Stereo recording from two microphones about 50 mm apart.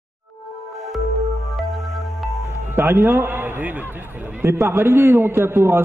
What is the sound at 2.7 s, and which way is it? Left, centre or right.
A man's voice, right.